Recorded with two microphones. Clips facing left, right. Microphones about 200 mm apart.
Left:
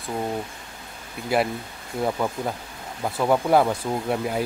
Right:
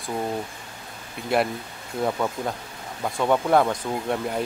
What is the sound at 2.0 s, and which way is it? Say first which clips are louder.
Speech: even; 5° left (ahead or behind).